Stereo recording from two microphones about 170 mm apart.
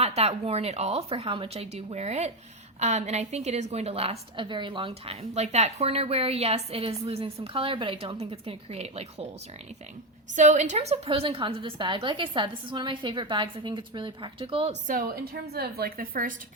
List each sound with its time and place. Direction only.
0.0 s a woman's voice: 40° right (ahead or behind)
10.3 s a woman's voice: 45° right (ahead or behind)
14.8 s a woman's voice: 60° right (ahead or behind)